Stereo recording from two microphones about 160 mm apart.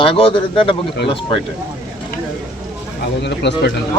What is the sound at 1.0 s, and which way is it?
Speech, 90° left.